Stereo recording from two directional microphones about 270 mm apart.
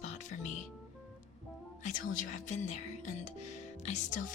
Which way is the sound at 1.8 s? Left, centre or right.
Left.